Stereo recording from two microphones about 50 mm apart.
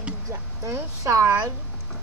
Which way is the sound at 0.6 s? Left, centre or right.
Right.